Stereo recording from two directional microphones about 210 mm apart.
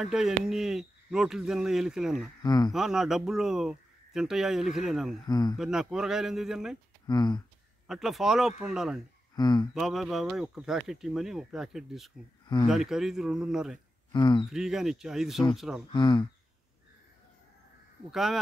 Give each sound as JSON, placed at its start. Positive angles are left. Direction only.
{"t": 0.0, "sound": "speech", "side_deg": 0}
{"t": 2.4, "sound": "speech", "side_deg": 20}
{"t": 2.7, "sound": "speech", "side_deg": 0}
{"t": 5.2, "sound": "speech", "side_deg": 20}
{"t": 5.6, "sound": "speech", "side_deg": 0}
{"t": 7.1, "sound": "speech", "side_deg": 20}
{"t": 7.8, "sound": "speech", "side_deg": 0}
{"t": 9.3, "sound": "speech", "side_deg": 20}
{"t": 9.8, "sound": "speech", "side_deg": 0}
{"t": 14.1, "sound": "speech", "side_deg": 20}
{"t": 14.5, "sound": "speech", "side_deg": 0}
{"t": 15.9, "sound": "speech", "side_deg": 20}
{"t": 18.1, "sound": "speech", "side_deg": 0}